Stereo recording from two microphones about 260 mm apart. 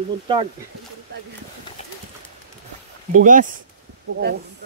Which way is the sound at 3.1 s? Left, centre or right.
Right.